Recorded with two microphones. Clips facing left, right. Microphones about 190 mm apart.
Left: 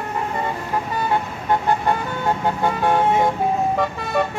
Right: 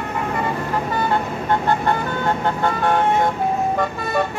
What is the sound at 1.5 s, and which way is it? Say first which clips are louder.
Vehicle: even; 10° left (ahead or behind).